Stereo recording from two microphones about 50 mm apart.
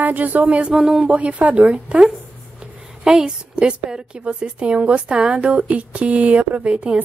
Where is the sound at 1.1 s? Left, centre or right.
Right.